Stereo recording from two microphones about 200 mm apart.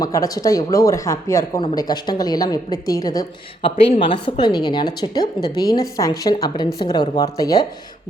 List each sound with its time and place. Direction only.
0.0 s a woman's voice: 15° left (ahead or behind)